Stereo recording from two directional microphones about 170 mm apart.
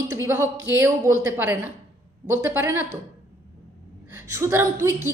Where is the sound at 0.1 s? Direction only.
15° right (ahead or behind).